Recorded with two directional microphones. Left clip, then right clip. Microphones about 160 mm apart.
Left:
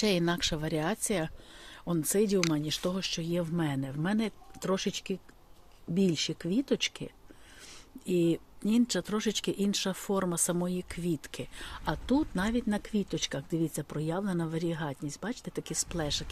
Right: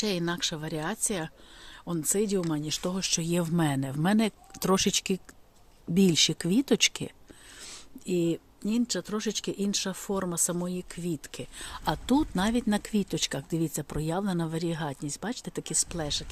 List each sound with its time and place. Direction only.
0.0 s speech: 10° left (ahead or behind); by 3.1 s 10° right (ahead or behind)
3.1 s speech: 25° right (ahead or behind)
8.0 s speech: 5° right (ahead or behind)